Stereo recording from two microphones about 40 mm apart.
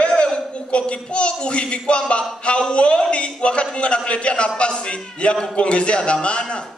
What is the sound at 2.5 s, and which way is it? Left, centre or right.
A man's voice, left.